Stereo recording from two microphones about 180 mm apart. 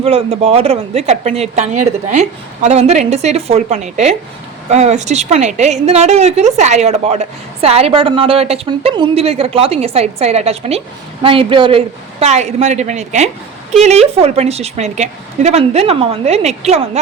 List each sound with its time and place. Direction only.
0.0 s a woman's voice: 30° right (ahead or behind)